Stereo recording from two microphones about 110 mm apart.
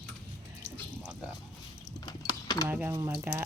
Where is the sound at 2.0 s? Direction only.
35° left (ahead or behind).